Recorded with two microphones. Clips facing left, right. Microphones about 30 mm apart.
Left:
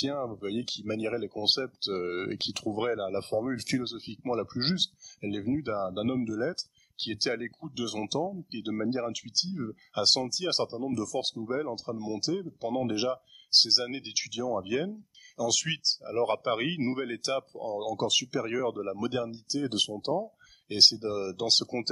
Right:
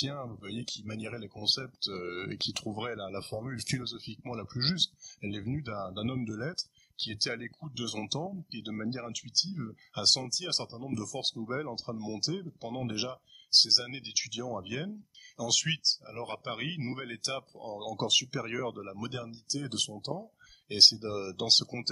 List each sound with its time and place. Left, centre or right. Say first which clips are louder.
0.0 s speech: left 6 dB; centre
0.7 s speech: left 7 dB; left
1.0 s speech: left 4 dB; centre
3.3 s speech: left 8 dB; centre
4.6 s speech: left 1 dB; centre
10.8 s speech: left 5 dB; centre
11.4 s speech: left 4 dB; centre
15.3 s speech: left 1 dB; centre
16.1 s speech: left 10 dB; left
17.0 s speech: left 6 dB; centre
17.6 s speech: left 1 dB; centre
18.9 s speech: left 8 dB; centre
20.7 s speech: even; centre
21.0 s speech: left 4 dB; centre